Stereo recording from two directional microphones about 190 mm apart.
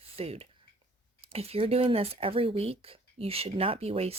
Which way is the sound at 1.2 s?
30° right (ahead or behind).